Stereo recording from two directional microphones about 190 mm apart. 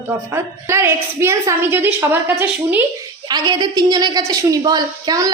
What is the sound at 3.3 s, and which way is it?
A woman's voice, 20° right (ahead or behind).